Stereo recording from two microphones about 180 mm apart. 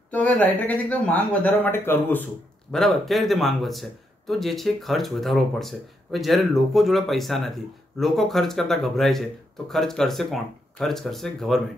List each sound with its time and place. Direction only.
0.1 s speech: 10° left (ahead or behind)